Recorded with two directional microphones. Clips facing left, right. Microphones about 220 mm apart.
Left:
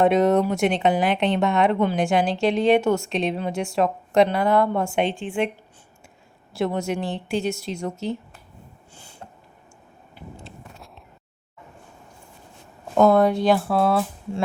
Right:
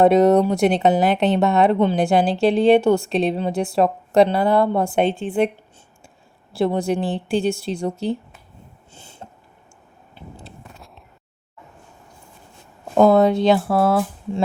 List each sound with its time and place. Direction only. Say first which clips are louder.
0.0 s speech: right 4 dB; 35° right (ahead or behind)
6.5 s speech: right 4 dB; 30° right (ahead or behind)
9.0 s a sound: right 3 dB; 25° right (ahead or behind)
13.1 s speech: right 3 dB; 25° right (ahead or behind)
13.7 s speech: right 3 dB; 5° right (ahead or behind)